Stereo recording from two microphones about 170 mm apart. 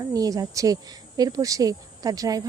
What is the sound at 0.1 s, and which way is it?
Speech, 20° right (ahead or behind).